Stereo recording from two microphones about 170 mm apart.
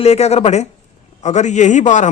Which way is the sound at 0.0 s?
40° left (ahead or behind).